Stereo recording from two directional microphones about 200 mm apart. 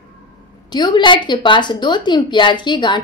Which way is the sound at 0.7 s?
20° left (ahead or behind).